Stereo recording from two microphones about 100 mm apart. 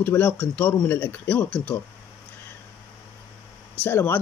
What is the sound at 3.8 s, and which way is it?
Speech, 20° left (ahead or behind).